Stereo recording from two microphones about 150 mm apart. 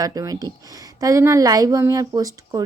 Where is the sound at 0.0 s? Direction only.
25° right (ahead or behind).